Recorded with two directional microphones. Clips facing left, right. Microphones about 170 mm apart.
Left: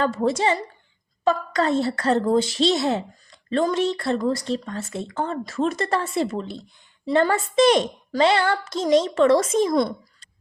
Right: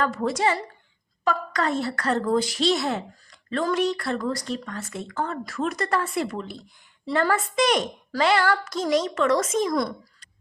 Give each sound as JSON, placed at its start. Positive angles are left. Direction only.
{"t": 0.0, "sound": "a woman's voice", "side_deg": 25}